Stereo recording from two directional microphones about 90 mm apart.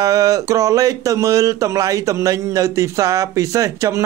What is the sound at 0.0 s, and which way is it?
Speech, 40° right (ahead or behind).